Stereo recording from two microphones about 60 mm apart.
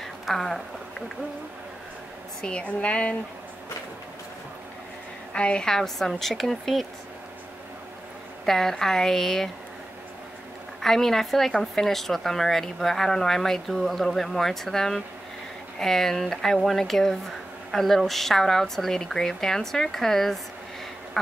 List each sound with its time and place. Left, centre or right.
0.0 s a sound: centre
2.4 s a woman's voice: centre
5.3 s a woman's voice: centre
8.5 s speech: centre
10.8 s a woman's voice: centre